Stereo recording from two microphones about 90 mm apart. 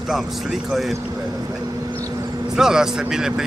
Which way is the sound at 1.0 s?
15° right (ahead or behind).